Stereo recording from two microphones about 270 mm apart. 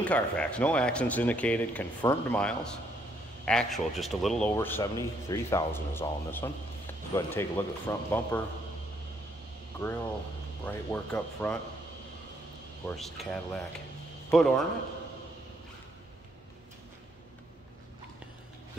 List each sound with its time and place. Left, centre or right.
0.0 s a man's voice: centre
10.6 s speech: centre
12.8 s speech: centre